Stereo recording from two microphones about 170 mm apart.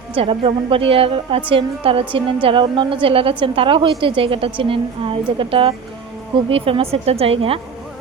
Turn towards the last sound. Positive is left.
turn(degrees=-35)  # may be behind; listen again after turning